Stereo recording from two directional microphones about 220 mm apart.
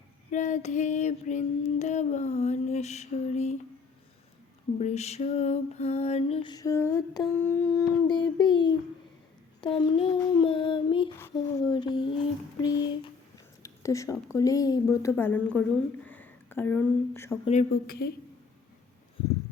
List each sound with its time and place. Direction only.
0.3 s female singing: 35° left (ahead or behind)
4.8 s lullaby: 30° left (ahead or behind)
12.6 s a woman's voice: 20° left (ahead or behind)
13.6 s a sound: 15° left (ahead or behind)
14.3 s a woman's voice: 15° left (ahead or behind)
17.4 s female singing: 30° left (ahead or behind)
17.8 s a woman's voice: 45° left (ahead or behind)